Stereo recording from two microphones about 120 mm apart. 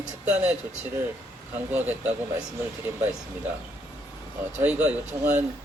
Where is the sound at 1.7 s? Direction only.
15° right (ahead or behind).